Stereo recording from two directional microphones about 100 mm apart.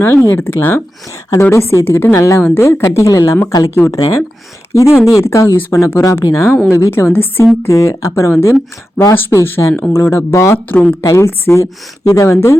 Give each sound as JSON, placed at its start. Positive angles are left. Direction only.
{"t": 0.0, "sound": "a woman's voice", "side_deg": 20}